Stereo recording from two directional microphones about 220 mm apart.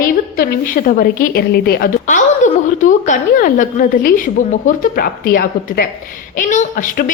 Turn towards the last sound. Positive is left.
turn(degrees=35)  # may be behind; listen again after turning